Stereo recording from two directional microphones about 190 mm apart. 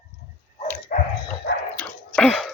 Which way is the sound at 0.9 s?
45° left (ahead or behind).